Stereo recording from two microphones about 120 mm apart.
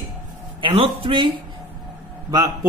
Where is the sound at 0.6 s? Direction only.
50° right (ahead or behind).